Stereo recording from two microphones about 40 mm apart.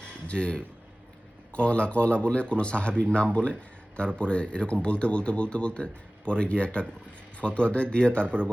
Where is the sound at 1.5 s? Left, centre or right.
Left.